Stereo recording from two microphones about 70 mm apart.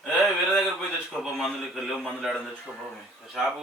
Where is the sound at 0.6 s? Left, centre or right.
Centre.